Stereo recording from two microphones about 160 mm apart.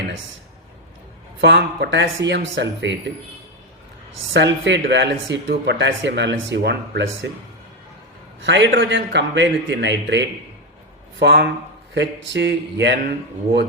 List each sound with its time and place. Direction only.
1.4 s speech: 90° right
4.4 s speech: 90° right
8.4 s speech: 90° right